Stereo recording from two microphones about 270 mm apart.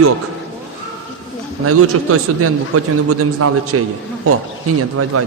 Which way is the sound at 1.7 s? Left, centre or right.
Right.